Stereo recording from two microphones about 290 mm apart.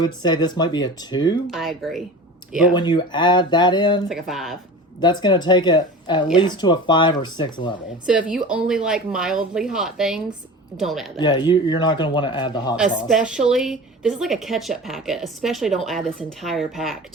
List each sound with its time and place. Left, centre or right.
0.0 s a man's voice: centre
1.5 s a woman's voice: centre
2.7 s a man's voice: centre
4.1 s a woman's voice: centre
4.9 s a man's voice: centre
8.0 s a woman's voice: centre
11.2 s a man's voice: centre
12.7 s a woman's voice: centre